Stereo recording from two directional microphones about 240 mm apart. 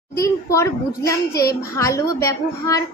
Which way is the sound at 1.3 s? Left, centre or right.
Left.